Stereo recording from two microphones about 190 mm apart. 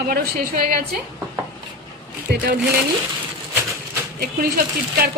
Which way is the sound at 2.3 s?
50° right (ahead or behind).